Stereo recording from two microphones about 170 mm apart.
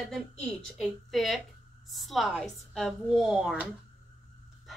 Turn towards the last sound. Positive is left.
turn(degrees=0)  # may be behind; listen again after turning